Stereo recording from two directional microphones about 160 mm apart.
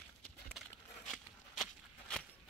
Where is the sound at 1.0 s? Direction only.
Centre (ahead or behind).